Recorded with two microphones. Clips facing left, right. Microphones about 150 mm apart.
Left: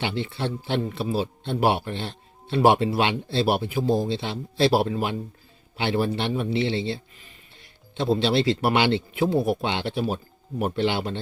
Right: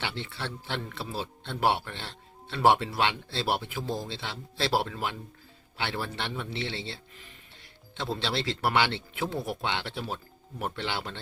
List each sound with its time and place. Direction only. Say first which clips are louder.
0.2 s speech: left 9 dB; 15° left (ahead or behind)